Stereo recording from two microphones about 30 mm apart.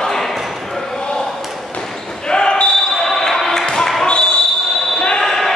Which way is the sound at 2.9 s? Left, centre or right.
Centre.